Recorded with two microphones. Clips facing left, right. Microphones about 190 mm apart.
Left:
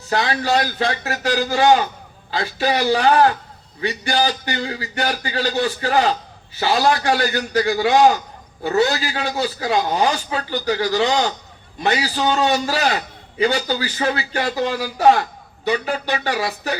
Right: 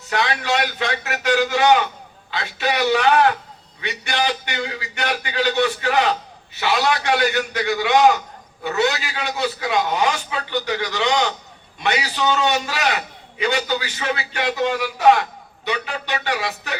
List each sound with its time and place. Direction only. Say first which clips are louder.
0.1 s a man's voice: left 3 dB; 35° left (ahead or behind)